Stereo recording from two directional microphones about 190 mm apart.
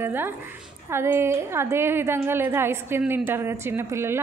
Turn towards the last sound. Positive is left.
turn(degrees=-15)  # may be behind; listen again after turning